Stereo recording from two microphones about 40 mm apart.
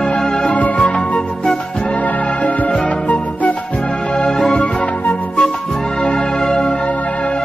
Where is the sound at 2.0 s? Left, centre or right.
Left.